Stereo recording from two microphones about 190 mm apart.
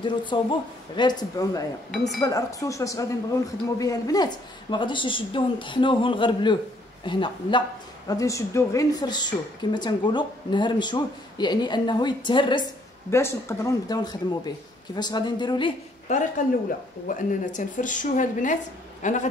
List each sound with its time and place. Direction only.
0.0 s a woman's voice: 25° left (ahead or behind)
1.9 s speech: 5° left (ahead or behind)
2.2 s a woman's voice: 15° left (ahead or behind)
13.1 s a woman's voice: 15° left (ahead or behind)
16.1 s a man's voice: 40° left (ahead or behind)